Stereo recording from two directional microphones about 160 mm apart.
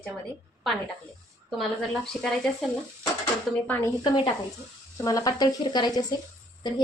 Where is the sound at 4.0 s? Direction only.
30° left (ahead or behind).